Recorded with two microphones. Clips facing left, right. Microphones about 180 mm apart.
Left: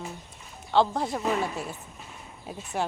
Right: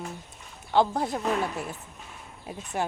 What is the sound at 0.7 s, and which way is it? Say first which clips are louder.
Speech: even; centre (ahead or behind).